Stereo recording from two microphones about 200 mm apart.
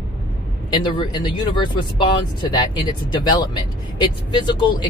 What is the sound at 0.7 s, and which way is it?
Speech, 20° left (ahead or behind).